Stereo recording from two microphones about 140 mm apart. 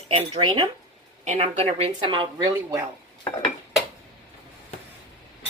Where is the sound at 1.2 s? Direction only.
55° right (ahead or behind).